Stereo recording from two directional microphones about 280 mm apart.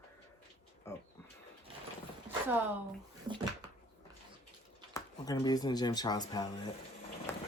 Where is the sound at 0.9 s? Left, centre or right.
Centre.